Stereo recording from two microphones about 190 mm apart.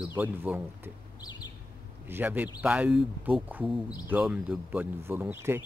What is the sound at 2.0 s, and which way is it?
Speech, 10° right (ahead or behind).